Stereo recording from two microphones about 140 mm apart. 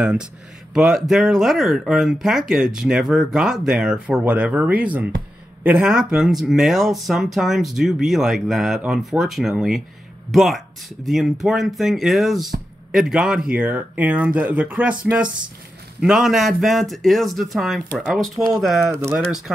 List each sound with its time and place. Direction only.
0.0 s speech: 5° right (ahead or behind)
15.2 s speech: 30° right (ahead or behind)
16.0 s speech: 5° right (ahead or behind)